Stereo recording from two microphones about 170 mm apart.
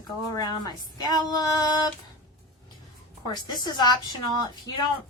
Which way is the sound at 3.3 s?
25° left (ahead or behind).